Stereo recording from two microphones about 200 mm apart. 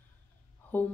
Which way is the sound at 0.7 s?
10° left (ahead or behind).